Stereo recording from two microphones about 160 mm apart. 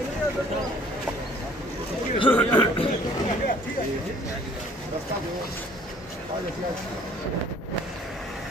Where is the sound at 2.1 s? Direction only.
30° left (ahead or behind).